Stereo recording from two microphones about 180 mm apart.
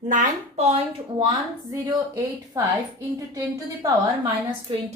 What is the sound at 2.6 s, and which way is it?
Speech, 20° right (ahead or behind).